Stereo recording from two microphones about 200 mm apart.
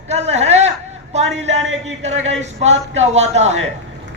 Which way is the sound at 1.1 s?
35° right (ahead or behind).